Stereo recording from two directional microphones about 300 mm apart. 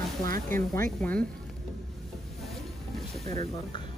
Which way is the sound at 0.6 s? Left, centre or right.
Centre.